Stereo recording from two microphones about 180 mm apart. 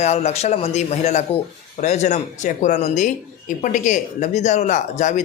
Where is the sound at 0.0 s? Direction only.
40° left (ahead or behind).